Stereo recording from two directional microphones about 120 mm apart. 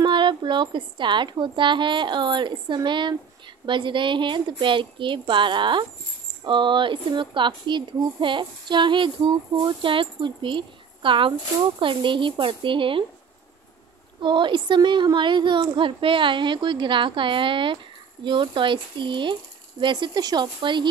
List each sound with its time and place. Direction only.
0.0 s speech: 40° right (ahead or behind)
14.2 s speech: 40° right (ahead or behind)